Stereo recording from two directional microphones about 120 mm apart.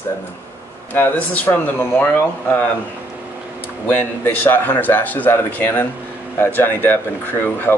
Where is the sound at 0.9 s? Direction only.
15° left (ahead or behind).